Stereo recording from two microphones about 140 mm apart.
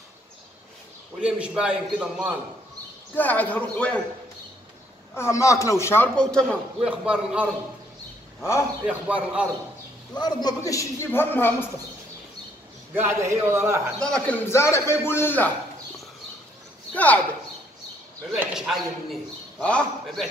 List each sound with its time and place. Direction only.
1.2 s a man's voice: 5° right (ahead or behind)
3.2 s a man's voice: 10° left (ahead or behind)
5.1 s a man's voice: 20° left (ahead or behind)
6.1 s a man's voice: 5° left (ahead or behind)
6.8 s a man's voice: 10° right (ahead or behind)
8.8 s a man's voice: 10° right (ahead or behind)
10.1 s a man's voice: 30° left (ahead or behind); by 11.5 s 15° left (ahead or behind)
12.9 s a man's voice: 15° right (ahead or behind)
13.9 s a man's voice: 5° left (ahead or behind)
16.9 s a man's voice: 10° left (ahead or behind)
18.4 s speech: 5° right (ahead or behind)
19.6 s a man's voice: 5° left (ahead or behind)